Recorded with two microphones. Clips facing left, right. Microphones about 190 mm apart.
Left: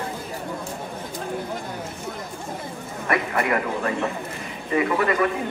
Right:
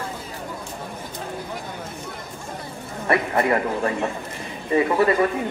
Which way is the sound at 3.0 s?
30° right (ahead or behind).